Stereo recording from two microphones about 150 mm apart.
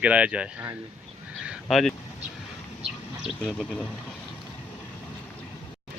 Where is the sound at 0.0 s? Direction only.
10° right (ahead or behind).